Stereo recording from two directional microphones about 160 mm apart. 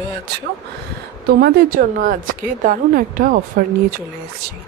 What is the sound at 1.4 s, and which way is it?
A woman's voice, 60° right (ahead or behind).